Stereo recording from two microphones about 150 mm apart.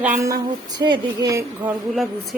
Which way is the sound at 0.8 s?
30° right (ahead or behind).